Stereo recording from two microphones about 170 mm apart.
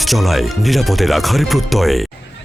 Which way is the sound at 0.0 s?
Centre (ahead or behind).